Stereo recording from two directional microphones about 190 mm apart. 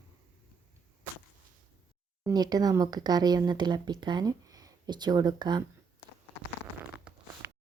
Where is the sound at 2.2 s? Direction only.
20° right (ahead or behind).